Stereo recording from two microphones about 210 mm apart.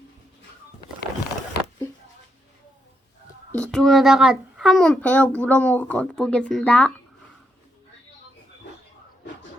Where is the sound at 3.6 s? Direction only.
Centre (ahead or behind).